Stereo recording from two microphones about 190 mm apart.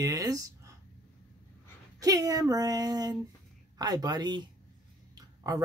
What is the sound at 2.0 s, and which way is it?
Speech, 20° right (ahead or behind).